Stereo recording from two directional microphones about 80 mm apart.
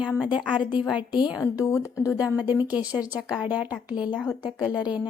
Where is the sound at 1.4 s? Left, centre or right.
Left.